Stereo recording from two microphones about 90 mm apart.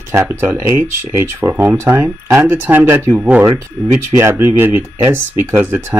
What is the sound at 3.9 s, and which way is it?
Speech, 30° right (ahead or behind).